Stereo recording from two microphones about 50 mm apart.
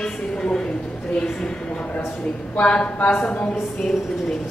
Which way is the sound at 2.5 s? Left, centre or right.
Left.